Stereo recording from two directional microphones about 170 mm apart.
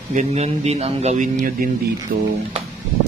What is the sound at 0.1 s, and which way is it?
Speech, 40° right (ahead or behind).